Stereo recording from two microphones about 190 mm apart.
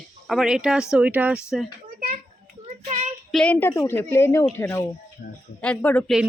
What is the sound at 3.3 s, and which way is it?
Speech, 5° left (ahead or behind).